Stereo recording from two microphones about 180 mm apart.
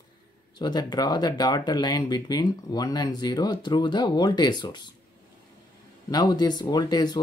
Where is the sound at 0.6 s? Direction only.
25° left (ahead or behind).